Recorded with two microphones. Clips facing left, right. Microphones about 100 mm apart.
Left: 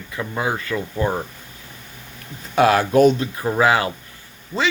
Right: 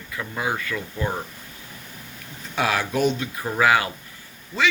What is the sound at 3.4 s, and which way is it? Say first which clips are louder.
Speech: left 1 dB; 30° left (ahead or behind).